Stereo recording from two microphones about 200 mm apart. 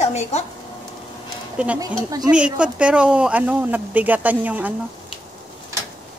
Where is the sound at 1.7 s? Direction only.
20° right (ahead or behind).